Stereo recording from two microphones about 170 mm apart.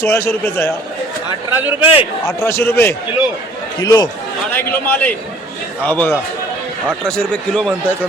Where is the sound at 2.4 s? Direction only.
15° left (ahead or behind).